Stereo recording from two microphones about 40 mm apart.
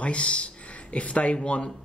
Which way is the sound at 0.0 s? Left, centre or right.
Left.